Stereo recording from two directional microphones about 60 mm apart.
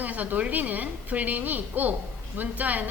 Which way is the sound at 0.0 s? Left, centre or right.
Right.